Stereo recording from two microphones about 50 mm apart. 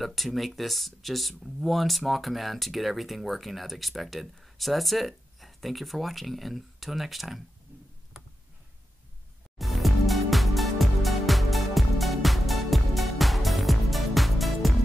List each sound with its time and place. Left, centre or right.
0.0 s speech: centre
8.2 s tick: centre
9.6 s music: centre